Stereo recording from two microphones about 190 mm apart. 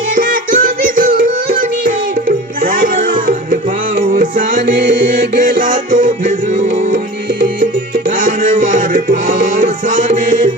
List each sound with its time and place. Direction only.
0.2 s music: 45° right (ahead or behind)